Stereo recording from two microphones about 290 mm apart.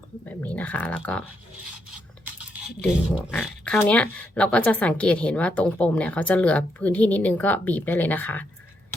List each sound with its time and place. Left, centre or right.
0.3 s speech: centre
2.2 s a sound: centre
3.4 s speech: centre